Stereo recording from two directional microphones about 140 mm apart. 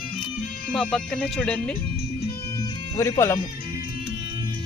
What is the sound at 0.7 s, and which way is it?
Speech, 5° left (ahead or behind).